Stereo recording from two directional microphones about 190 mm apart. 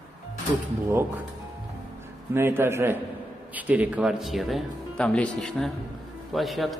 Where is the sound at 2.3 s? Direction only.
10° right (ahead or behind).